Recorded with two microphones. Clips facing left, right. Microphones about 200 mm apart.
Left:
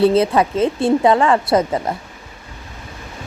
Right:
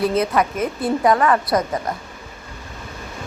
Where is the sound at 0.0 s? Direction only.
30° left (ahead or behind).